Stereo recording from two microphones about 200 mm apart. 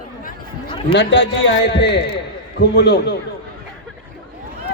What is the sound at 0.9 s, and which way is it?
A man's voice, 60° left (ahead or behind).